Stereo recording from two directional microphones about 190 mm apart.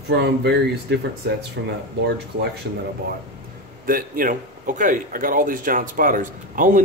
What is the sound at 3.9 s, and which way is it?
Speech, 50° right (ahead or behind).